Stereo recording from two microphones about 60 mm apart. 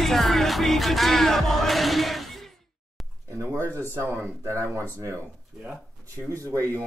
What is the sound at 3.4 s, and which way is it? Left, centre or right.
Speech, right.